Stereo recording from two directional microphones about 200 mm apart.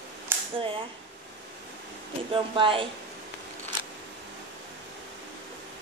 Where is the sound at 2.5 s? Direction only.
25° right (ahead or behind).